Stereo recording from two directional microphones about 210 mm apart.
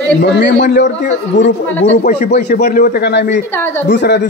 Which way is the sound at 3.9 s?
55° left (ahead or behind).